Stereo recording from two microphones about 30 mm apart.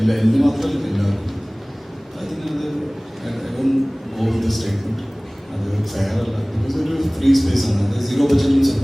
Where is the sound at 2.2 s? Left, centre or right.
Centre.